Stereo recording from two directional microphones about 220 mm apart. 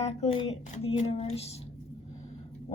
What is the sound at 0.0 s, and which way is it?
A woman's voice, 30° left (ahead or behind).